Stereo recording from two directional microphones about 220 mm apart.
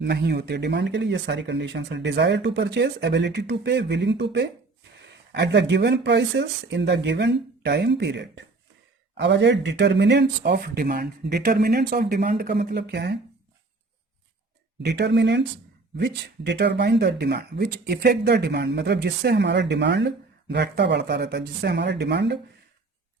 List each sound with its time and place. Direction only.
0.0 s speech: 50° right (ahead or behind)
14.8 s speech: 50° right (ahead or behind)